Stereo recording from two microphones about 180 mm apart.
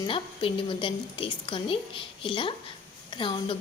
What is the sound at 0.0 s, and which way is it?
A woman's voice, 30° left (ahead or behind).